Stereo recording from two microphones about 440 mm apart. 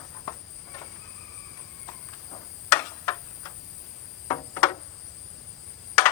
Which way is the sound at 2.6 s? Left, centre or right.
Centre.